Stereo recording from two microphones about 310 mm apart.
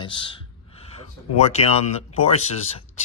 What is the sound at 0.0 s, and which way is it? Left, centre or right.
Speech, centre.